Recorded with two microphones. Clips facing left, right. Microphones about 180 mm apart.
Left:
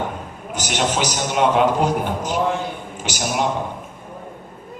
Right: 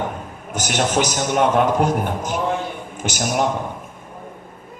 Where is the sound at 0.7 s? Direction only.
50° right (ahead or behind).